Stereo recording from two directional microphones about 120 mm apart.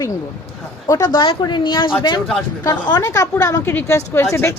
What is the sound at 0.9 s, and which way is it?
Speech, 30° left (ahead or behind).